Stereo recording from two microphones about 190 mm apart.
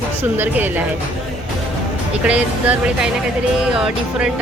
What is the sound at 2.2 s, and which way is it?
Speech, 5° right (ahead or behind).